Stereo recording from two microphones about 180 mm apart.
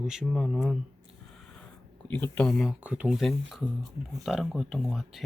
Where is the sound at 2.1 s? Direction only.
10° left (ahead or behind).